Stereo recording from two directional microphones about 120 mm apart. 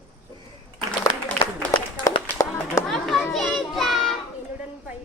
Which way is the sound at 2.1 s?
25° left (ahead or behind).